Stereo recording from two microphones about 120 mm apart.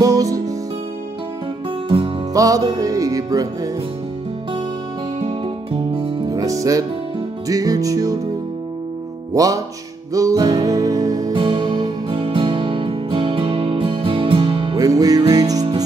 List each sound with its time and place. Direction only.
0.0 s music: 30° right (ahead or behind)
2.3 s music: 30° right (ahead or behind)
5.2 s music: 45° right (ahead or behind)
6.2 s music: 30° right (ahead or behind)
9.3 s music: 30° right (ahead or behind)
11.3 s music: 40° right (ahead or behind)
14.8 s music: 30° right (ahead or behind)